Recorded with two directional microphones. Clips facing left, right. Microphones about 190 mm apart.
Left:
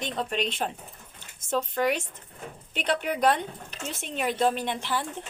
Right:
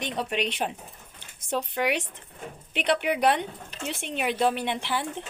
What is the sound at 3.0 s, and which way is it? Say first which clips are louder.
Speech: right 1 dB; 15° right (ahead or behind).